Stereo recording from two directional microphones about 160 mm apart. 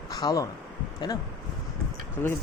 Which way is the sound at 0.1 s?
25° left (ahead or behind).